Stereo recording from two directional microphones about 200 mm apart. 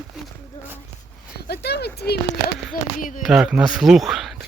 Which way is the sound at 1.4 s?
55° left (ahead or behind).